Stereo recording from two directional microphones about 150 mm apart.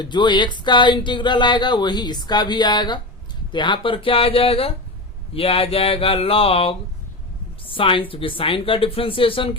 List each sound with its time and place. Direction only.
0.0 s speech: 30° left (ahead or behind)